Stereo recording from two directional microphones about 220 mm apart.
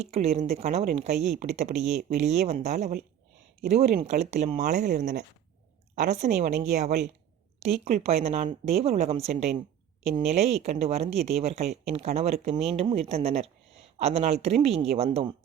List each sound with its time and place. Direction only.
0.0 s speech: 30° right (ahead or behind)
1.1 s speech: centre (ahead or behind)
1.4 s speech: 30° right (ahead or behind)